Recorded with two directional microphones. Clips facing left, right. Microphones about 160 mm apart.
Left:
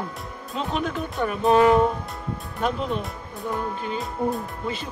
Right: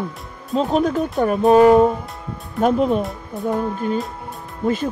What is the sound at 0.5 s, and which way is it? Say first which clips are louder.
Speech: right 9 dB; 40° right (ahead or behind).